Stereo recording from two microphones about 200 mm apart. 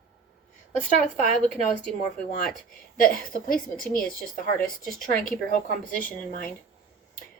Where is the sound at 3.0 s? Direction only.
45° left (ahead or behind).